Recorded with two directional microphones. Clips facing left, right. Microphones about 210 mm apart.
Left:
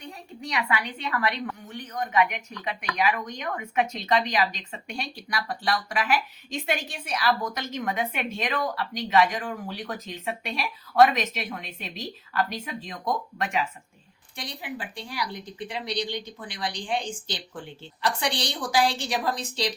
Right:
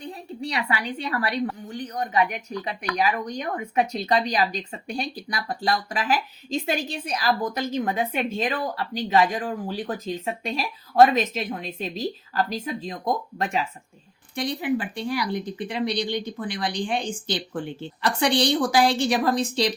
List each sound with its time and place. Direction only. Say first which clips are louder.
0.0 s a woman's voice: right 6 dB; 30° right (ahead or behind)
14.3 s a woman's voice: right 11 dB; 55° right (ahead or behind)